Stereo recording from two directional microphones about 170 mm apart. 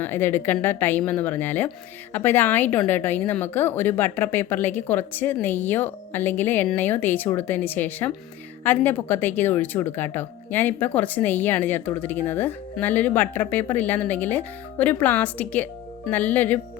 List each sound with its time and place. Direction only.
0.0 s a woman's voice: 15° left (ahead or behind)